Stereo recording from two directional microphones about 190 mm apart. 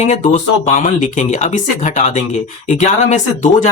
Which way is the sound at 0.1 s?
40° left (ahead or behind).